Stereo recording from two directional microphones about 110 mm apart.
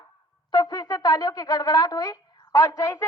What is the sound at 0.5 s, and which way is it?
A woman's voice, 35° left (ahead or behind).